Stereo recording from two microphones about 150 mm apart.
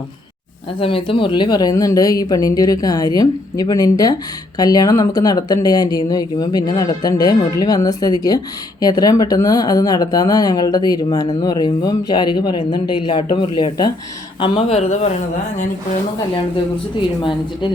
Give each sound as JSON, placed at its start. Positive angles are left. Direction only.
{"t": 0.8, "sound": "speech", "side_deg": 35}
{"t": 14.4, "sound": "speech", "side_deg": 40}